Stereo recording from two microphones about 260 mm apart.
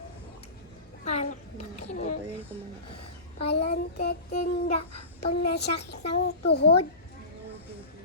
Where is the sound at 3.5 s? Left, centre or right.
Left.